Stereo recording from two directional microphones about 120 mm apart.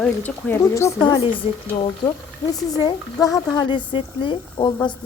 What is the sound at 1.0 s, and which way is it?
Speech, 40° left (ahead or behind).